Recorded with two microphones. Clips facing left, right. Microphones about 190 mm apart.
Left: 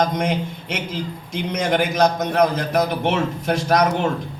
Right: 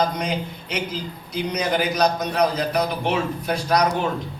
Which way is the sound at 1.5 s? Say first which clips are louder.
Left 3 dB; 50° left (ahead or behind).